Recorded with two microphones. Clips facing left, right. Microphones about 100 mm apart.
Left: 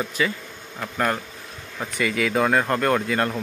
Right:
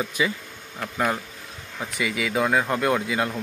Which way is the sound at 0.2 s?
15° right (ahead or behind).